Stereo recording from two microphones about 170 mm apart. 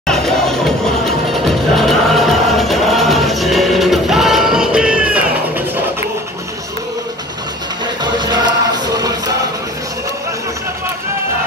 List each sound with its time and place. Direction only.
0.0 s music: 5° left (ahead or behind)
1.8 s music: centre (ahead or behind)
8.0 s music: 25° right (ahead or behind)